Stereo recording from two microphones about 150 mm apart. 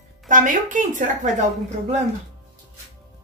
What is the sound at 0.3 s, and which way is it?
A woman's voice, 60° right (ahead or behind).